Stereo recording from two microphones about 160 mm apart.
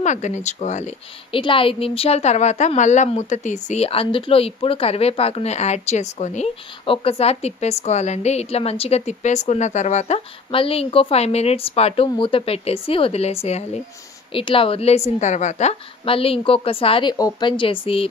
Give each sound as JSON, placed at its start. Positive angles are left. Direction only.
{"t": 0.0, "sound": "speech", "side_deg": 50}
{"t": 1.3, "sound": "a woman's voice", "side_deg": 35}